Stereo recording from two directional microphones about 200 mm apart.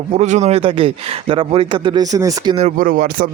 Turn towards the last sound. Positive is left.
turn(degrees=-40)  # may be behind; listen again after turning